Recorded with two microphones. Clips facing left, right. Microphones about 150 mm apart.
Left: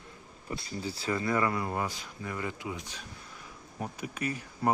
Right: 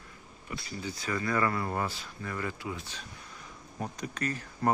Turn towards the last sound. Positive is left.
turn(degrees=10)  # may be behind; listen again after turning